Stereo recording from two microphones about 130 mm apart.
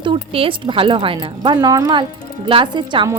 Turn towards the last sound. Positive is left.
turn(degrees=-35)  # may be behind; listen again after turning